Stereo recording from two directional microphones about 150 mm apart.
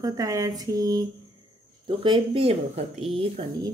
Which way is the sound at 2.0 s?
35° right (ahead or behind).